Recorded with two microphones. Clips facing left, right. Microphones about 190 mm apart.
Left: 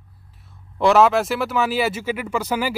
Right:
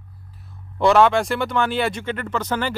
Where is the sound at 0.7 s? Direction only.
Centre (ahead or behind).